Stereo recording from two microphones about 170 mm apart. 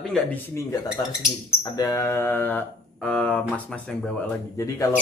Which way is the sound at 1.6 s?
20° left (ahead or behind).